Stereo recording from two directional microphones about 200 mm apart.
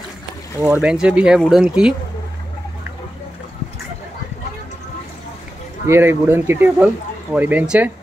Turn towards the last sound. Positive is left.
turn(degrees=-5)  # may be behind; listen again after turning